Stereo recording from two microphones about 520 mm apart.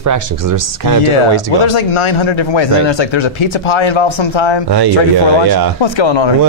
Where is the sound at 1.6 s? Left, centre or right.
Left.